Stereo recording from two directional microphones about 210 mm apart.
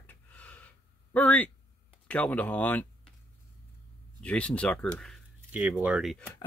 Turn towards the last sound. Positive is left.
turn(degrees=0)  # may be behind; listen again after turning